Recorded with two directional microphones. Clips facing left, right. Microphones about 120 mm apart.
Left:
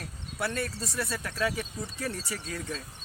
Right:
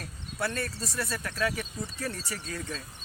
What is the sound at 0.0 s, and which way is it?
Cricket, centre (ahead or behind).